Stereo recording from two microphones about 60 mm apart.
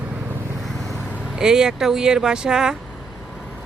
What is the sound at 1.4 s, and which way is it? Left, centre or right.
Speech, centre.